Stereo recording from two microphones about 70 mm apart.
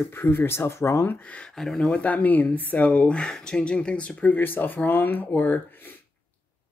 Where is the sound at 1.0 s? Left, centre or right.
Left.